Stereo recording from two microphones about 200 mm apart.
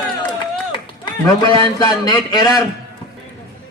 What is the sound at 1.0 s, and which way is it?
A man's voice, 20° left (ahead or behind).